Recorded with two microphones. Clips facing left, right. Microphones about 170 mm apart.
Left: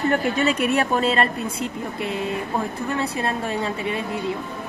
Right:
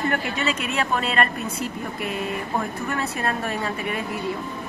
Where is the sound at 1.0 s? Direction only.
30° left (ahead or behind).